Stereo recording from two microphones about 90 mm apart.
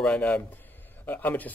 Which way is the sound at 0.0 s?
15° left (ahead or behind).